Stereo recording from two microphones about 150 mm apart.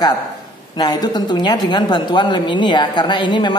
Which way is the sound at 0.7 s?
25° left (ahead or behind).